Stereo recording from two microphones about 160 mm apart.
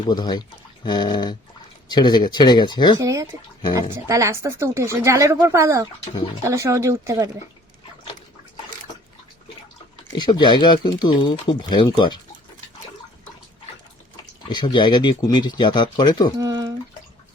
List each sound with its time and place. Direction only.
0.1 s speech: 25° left (ahead or behind)
3.0 s speech: 20° right (ahead or behind)
10.1 s speech: 25° left (ahead or behind)
14.5 s speech: 30° left (ahead or behind)
16.4 s speech: 25° right (ahead or behind)